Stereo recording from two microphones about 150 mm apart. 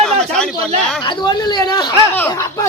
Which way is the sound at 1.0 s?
30° left (ahead or behind).